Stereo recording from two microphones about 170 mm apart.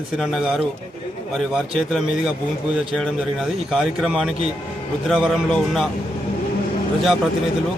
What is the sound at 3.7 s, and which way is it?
Speech, 5° right (ahead or behind).